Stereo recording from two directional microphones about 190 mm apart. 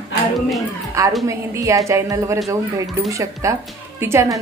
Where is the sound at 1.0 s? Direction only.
15° right (ahead or behind).